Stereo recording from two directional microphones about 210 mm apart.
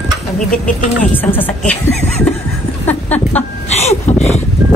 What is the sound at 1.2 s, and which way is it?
Speech, 10° left (ahead or behind).